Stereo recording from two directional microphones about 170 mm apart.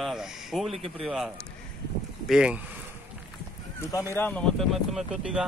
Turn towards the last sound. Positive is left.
turn(degrees=-5)  # may be behind; listen again after turning